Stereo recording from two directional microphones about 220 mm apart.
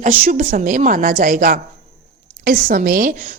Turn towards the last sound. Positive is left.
turn(degrees=-40)  # may be behind; listen again after turning